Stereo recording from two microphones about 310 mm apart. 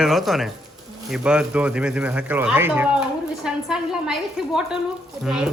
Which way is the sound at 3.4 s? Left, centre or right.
Centre.